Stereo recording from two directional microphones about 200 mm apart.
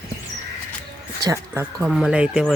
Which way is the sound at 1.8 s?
Centre (ahead or behind).